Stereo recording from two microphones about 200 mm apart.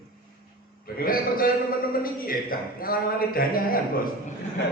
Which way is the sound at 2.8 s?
45° left (ahead or behind).